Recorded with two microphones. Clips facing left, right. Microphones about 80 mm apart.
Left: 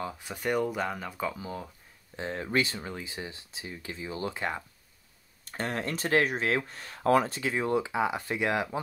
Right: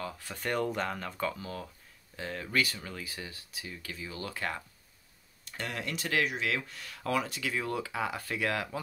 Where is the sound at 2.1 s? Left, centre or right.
Left.